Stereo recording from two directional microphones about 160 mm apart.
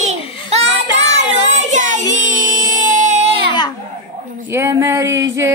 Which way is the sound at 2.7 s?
50° right (ahead or behind).